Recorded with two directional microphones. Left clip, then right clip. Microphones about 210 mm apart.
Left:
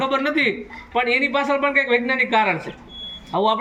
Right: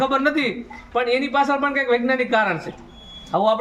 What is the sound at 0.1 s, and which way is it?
Speech, 20° right (ahead or behind).